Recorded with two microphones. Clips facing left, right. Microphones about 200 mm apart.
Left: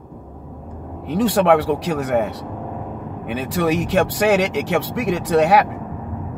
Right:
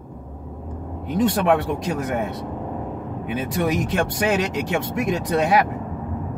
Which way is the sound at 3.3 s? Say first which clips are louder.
Left 3 dB; 80° left.